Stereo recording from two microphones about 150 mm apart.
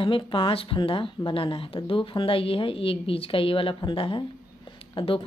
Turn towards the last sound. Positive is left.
turn(degrees=35)  # may be behind; listen again after turning